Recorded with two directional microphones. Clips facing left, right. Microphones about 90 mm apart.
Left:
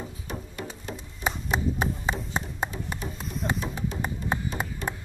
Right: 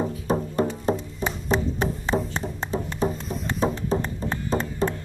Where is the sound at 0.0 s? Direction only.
40° right (ahead or behind).